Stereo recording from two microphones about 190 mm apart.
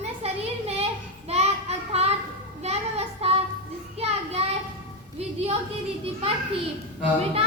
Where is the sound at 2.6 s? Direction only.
35° right (ahead or behind).